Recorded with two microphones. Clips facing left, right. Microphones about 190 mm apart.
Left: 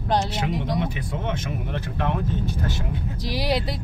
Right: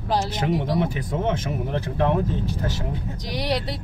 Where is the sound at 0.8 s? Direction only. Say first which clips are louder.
Right 4 dB; 40° right (ahead or behind).